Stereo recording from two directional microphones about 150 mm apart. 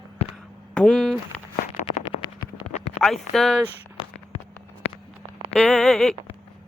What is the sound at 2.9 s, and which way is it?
Speech, centre (ahead or behind).